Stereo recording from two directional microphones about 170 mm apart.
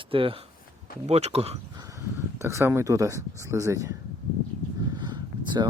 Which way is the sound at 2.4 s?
15° right (ahead or behind).